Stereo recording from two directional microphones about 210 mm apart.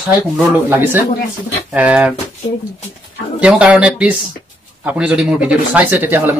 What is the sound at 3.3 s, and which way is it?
Speech, 5° right (ahead or behind).